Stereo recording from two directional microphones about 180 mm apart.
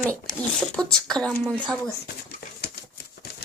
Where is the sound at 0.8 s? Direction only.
5° left (ahead or behind).